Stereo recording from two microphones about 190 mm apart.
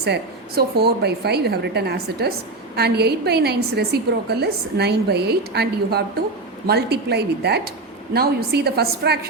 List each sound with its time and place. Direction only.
0.0 s a woman's voice: 60° right (ahead or behind)